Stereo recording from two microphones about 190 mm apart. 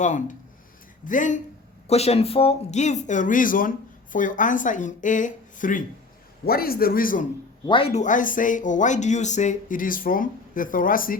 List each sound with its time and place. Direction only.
0.0 s speech: 40° left (ahead or behind)
7.7 s speech: 30° left (ahead or behind); by 11.2 s 45° left (ahead or behind)